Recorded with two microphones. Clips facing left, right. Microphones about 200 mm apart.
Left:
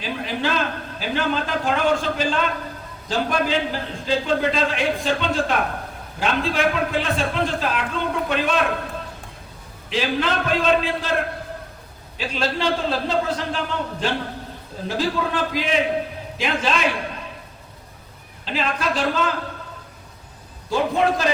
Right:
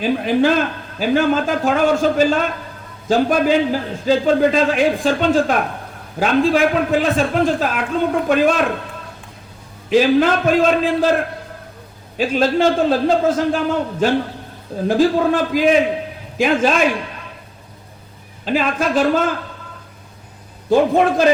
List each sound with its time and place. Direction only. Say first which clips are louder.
0.0 s a man's voice: right 10 dB; 50° right (ahead or behind)
9.9 s a man's voice: right 9 dB; 45° right (ahead or behind)
12.1 s a man's voice: right 9 dB; 45° right (ahead or behind)
18.4 s a man's voice: right 6 dB; 45° right (ahead or behind)
20.7 s a man's voice: right 6 dB; 50° right (ahead or behind)